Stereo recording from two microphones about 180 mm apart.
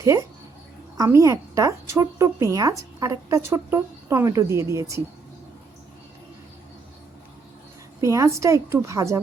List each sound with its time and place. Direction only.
0.0 s a woman's voice: 20° right (ahead or behind)
8.0 s a woman's voice: 15° right (ahead or behind)